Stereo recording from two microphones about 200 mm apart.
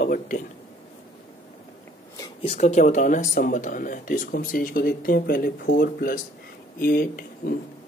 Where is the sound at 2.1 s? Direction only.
20° left (ahead or behind).